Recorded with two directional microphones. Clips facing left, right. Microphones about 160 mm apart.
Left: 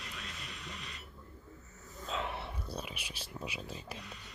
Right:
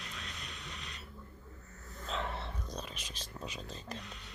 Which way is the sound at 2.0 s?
10° left (ahead or behind).